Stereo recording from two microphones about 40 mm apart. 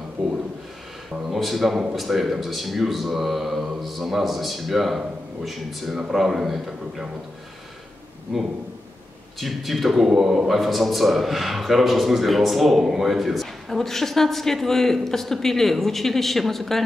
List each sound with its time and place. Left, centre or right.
0.2 s a man's voice: centre
8.3 s a man's voice: centre
9.4 s a man's voice: centre